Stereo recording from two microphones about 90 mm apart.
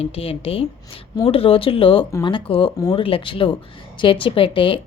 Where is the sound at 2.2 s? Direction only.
75° left (ahead or behind).